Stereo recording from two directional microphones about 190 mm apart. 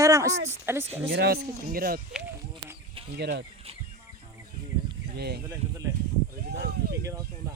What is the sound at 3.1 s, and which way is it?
Speech, 60° right (ahead or behind).